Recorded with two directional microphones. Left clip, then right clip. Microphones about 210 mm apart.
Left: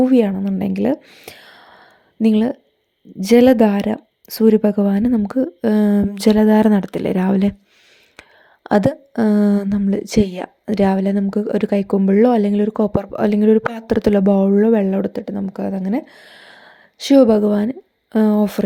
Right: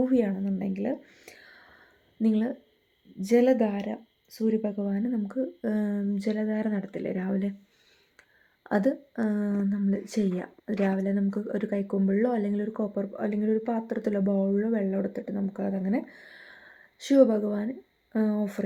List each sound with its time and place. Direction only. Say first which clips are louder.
0.0 s speech: left 11 dB; 40° left (ahead or behind)
8.6 s speech: left 10 dB; 40° left (ahead or behind)